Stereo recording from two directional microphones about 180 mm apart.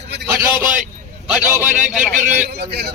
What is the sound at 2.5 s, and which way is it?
Speech, 65° right (ahead or behind).